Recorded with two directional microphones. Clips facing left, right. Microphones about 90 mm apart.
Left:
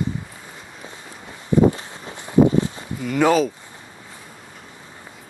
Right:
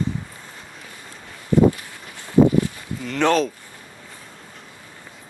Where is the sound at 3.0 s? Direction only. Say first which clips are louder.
Left 2 dB; 5° left (ahead or behind).